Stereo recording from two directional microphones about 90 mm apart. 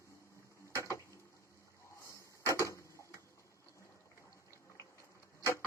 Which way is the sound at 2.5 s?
35° left (ahead or behind).